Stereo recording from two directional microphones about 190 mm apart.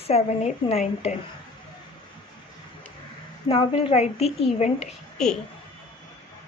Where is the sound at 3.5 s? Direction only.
30° left (ahead or behind).